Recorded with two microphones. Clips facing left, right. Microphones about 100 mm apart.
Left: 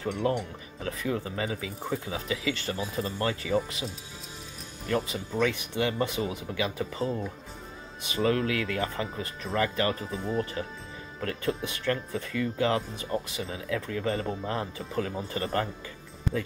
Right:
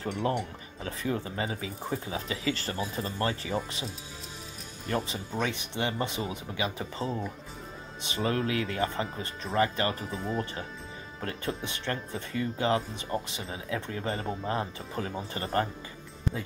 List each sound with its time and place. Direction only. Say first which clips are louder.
0.0 s speech: left 2 dB; 35° right (ahead or behind)
4.8 s speech: left 2 dB; 30° right (ahead or behind)